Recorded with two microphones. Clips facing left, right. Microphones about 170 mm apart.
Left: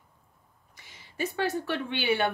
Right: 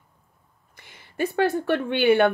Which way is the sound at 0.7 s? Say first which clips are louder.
Right 6 dB; 55° right (ahead or behind).